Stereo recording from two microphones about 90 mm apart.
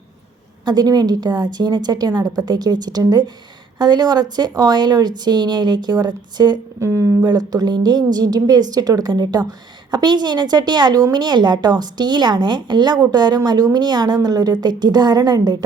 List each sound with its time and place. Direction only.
0.6 s speech: 50° right (ahead or behind)
6.7 s speech: 35° right (ahead or behind)
7.3 s speech: 50° right (ahead or behind)